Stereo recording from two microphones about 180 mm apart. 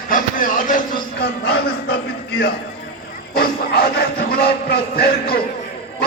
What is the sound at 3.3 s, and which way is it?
Speech, 55° left (ahead or behind).